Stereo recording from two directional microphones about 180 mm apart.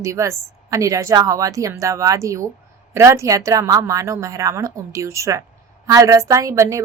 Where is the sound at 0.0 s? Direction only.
15° right (ahead or behind).